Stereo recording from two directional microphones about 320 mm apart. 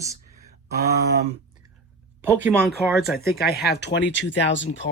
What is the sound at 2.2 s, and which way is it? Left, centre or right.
Speech, centre.